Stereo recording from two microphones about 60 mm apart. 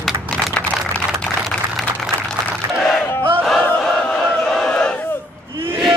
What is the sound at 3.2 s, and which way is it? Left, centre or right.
Battle cry, right.